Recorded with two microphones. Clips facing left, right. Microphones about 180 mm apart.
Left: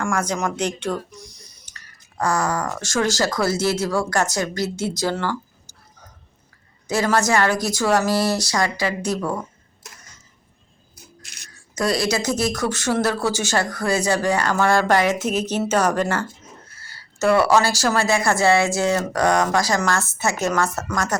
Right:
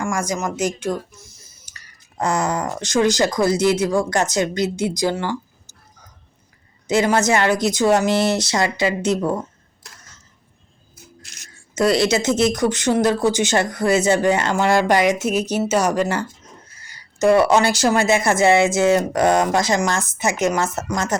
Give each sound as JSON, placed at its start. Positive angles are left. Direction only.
{"t": 0.0, "sound": "speech", "side_deg": -10}
{"t": 2.1, "sound": "speech", "side_deg": -20}
{"t": 6.8, "sound": "speech", "side_deg": -20}
{"t": 11.5, "sound": "speech", "side_deg": -25}